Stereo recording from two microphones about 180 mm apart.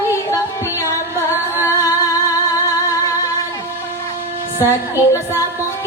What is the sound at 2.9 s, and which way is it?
Music, 20° left (ahead or behind).